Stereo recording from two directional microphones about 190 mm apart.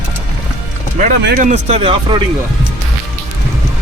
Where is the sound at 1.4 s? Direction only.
40° right (ahead or behind).